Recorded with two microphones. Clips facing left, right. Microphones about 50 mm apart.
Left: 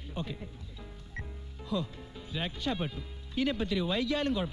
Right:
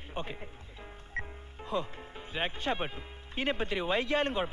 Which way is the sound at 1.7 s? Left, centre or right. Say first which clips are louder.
Even; right.